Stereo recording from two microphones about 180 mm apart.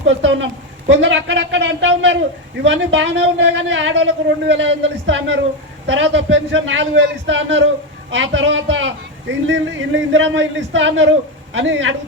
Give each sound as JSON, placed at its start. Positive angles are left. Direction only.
{"t": 0.1, "sound": "a man's voice", "side_deg": -90}